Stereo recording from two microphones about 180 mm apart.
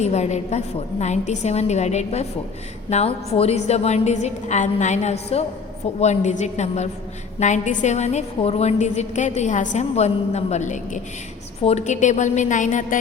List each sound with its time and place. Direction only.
0.0 s a woman's voice: 40° left (ahead or behind)